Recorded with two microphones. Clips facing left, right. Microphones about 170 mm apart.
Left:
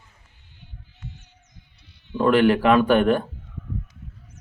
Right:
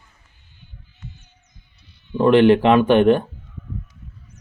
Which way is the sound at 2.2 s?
20° right (ahead or behind).